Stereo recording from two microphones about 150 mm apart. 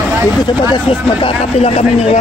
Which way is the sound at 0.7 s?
40° left (ahead or behind).